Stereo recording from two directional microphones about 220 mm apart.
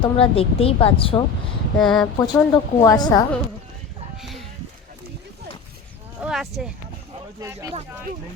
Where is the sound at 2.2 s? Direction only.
15° left (ahead or behind).